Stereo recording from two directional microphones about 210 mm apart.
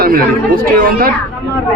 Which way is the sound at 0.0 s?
45° right (ahead or behind).